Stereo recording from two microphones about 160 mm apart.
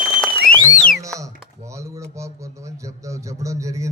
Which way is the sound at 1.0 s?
20° right (ahead or behind).